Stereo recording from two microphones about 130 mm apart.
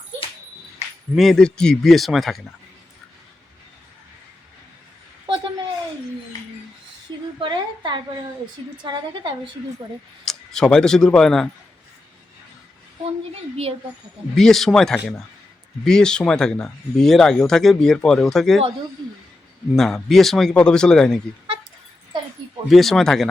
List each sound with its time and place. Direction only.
1.1 s speech: centre (ahead or behind)
5.2 s a sound: 40° right (ahead or behind)
7.3 s a sound: 40° right (ahead or behind)
8.8 s a woman's voice: 40° right (ahead or behind)
10.2 s speech: 5° left (ahead or behind)
14.3 s speech: centre (ahead or behind)
19.7 s speech: 5° left (ahead or behind)
22.1 s a sound: 35° right (ahead or behind)
22.7 s speech: centre (ahead or behind)